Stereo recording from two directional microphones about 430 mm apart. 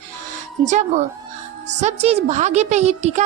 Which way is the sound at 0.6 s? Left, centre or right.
Centre.